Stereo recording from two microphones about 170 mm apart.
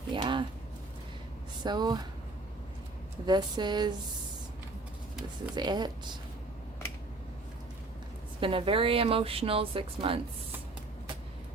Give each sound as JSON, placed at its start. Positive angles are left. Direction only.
{"t": 0.1, "sound": "a sound", "side_deg": -30}
{"t": 1.6, "sound": "speech", "side_deg": -25}
{"t": 3.2, "sound": "speech", "side_deg": -25}
{"t": 5.5, "sound": "speech", "side_deg": -25}
{"t": 8.4, "sound": "speech", "side_deg": -30}